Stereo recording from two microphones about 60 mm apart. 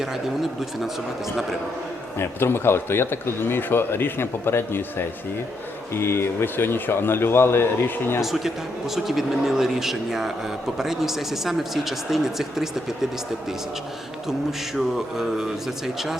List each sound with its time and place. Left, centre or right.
2.1 s speech: left
8.2 s speech: centre
14.8 s speech: centre